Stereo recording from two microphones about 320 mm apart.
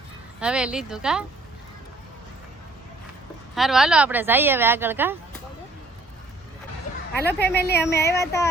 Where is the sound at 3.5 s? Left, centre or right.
Centre.